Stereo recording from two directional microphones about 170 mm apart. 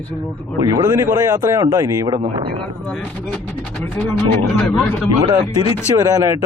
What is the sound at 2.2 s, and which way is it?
Speech, 30° right (ahead or behind).